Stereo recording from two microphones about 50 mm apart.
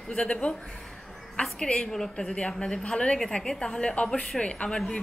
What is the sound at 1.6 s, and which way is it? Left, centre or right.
A woman's voice, left.